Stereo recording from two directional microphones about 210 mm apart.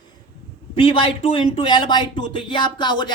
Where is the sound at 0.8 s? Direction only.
25° left (ahead or behind).